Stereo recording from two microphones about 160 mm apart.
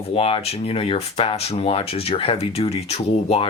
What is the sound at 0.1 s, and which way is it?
Speech, 35° left (ahead or behind).